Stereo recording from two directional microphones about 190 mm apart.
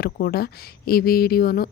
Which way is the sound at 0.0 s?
50° left (ahead or behind).